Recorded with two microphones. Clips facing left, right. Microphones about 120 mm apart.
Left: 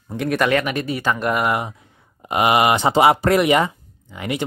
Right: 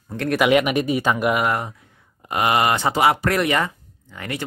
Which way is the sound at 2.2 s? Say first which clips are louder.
Left 3 dB; 20° left (ahead or behind).